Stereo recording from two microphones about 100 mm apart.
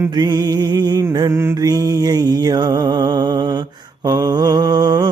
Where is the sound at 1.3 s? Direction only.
25° right (ahead or behind).